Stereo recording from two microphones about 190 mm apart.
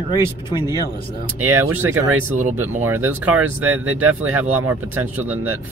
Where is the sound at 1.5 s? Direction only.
10° right (ahead or behind).